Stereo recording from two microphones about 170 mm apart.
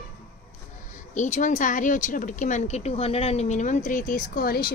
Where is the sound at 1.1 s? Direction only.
45° left (ahead or behind).